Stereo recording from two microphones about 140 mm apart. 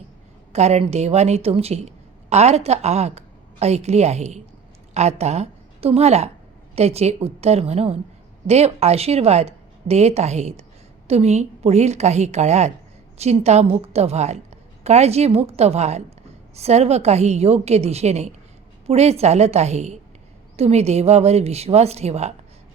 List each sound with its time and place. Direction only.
0.5 s a woman's voice: 50° right (ahead or behind)